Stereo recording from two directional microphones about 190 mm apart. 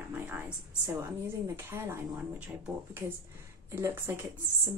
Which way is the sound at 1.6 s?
10° right (ahead or behind).